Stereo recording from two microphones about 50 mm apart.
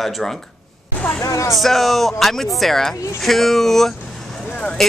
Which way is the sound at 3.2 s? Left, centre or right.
Centre.